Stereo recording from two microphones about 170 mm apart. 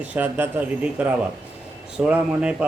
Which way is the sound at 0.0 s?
10° right (ahead or behind).